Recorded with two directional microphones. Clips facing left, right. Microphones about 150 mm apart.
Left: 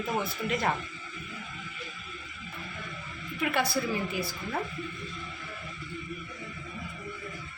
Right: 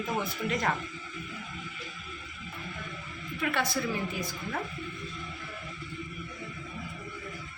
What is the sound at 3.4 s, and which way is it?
Speech, 10° left (ahead or behind).